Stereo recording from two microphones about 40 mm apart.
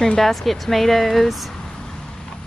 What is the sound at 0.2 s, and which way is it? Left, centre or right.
Speech, centre.